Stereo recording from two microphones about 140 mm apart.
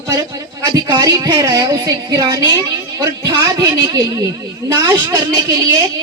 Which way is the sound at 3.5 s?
25° right (ahead or behind).